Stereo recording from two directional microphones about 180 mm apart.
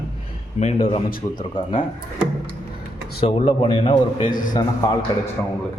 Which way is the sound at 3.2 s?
30° left (ahead or behind).